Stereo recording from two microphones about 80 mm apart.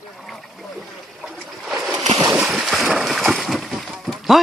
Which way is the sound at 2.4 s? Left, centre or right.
Centre.